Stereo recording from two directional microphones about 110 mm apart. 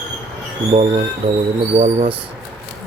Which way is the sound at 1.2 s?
55° right (ahead or behind).